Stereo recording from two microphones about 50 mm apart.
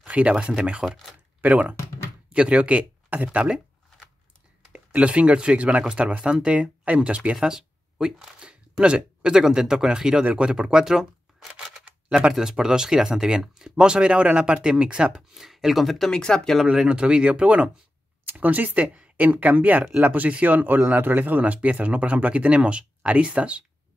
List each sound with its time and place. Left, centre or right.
0.0 s speech: right
4.7 s speech: right
7.3 s a sound: centre
9.4 s speech: centre
15.1 s speech: centre
16.1 s speech: centre
16.6 s speech: centre